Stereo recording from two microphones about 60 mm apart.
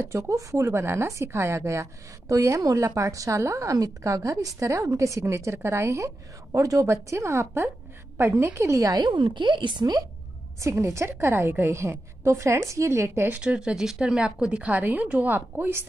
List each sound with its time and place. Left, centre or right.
0.0 s a woman's voice: right
8.5 s a woman's voice: right
10.6 s a woman's voice: right
13.3 s a woman's voice: centre; by 15.8 s right